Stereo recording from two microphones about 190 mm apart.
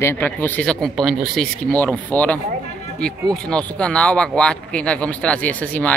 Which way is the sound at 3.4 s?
5° left (ahead or behind).